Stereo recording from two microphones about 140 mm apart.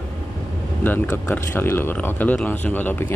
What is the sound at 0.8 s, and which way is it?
Speech, 15° left (ahead or behind).